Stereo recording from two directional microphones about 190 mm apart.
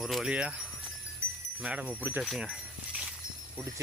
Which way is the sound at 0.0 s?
Centre (ahead or behind).